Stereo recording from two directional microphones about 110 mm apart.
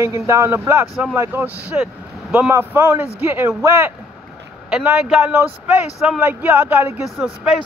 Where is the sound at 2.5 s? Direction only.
20° right (ahead or behind).